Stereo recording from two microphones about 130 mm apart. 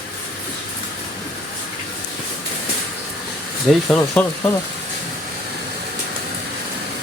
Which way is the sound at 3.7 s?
5° left (ahead or behind).